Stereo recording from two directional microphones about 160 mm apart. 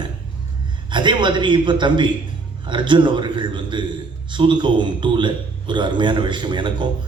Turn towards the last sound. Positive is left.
turn(degrees=-30)  # may be behind; listen again after turning